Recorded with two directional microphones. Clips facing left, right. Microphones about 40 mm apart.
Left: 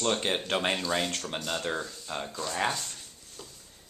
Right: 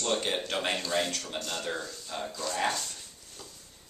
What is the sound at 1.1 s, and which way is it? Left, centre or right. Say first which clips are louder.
Speech: left 2 dB; left.